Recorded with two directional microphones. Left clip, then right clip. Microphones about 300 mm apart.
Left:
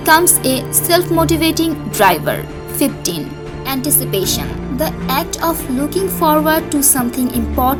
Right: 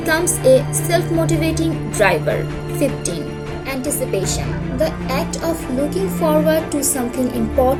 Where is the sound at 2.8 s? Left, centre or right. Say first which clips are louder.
Left 2 dB; left.